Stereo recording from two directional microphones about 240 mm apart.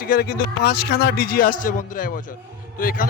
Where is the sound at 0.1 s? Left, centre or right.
Left.